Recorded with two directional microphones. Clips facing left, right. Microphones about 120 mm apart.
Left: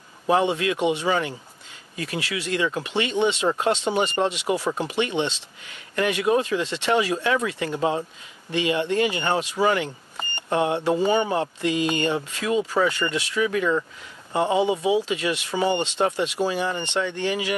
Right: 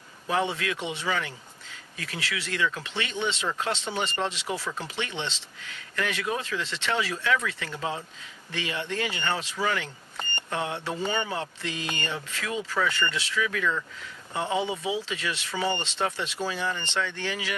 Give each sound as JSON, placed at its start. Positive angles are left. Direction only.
{"t": 0.4, "sound": "speech", "side_deg": 20}